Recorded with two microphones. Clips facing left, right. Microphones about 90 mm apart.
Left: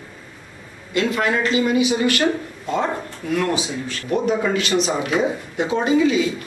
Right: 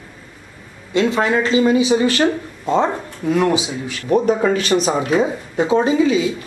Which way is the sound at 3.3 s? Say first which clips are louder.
Right 5 dB; 20° right (ahead or behind).